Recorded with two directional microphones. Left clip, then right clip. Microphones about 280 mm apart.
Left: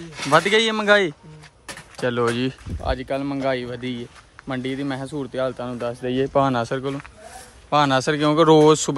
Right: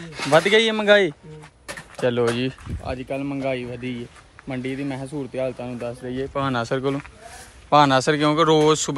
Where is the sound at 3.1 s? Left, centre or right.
Centre.